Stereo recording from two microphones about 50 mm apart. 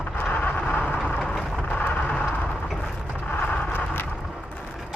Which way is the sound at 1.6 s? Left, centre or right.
Left.